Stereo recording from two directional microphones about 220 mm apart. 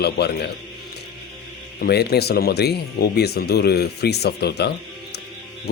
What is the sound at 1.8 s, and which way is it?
Speech, 45° left (ahead or behind).